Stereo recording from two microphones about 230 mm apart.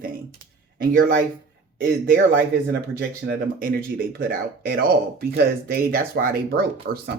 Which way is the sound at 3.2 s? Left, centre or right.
Right.